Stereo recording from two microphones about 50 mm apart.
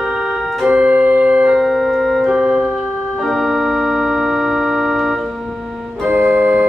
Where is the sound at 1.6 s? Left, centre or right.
Centre.